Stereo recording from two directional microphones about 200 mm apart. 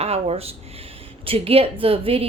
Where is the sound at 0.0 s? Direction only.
30° right (ahead or behind).